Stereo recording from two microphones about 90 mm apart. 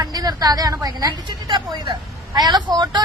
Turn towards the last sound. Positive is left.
turn(degrees=-50)  # may be behind; listen again after turning